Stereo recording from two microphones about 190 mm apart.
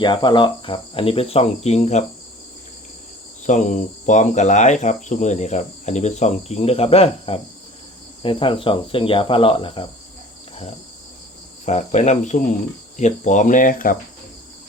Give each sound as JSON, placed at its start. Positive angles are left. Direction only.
{"t": 0.0, "sound": "cricket", "side_deg": 25}
{"t": 3.4, "sound": "cricket", "side_deg": 40}
{"t": 11.6, "sound": "cricket", "side_deg": 35}